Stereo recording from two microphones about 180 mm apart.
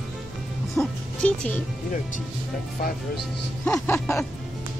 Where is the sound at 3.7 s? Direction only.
10° left (ahead or behind).